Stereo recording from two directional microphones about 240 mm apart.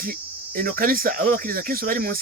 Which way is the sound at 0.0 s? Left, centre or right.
Right.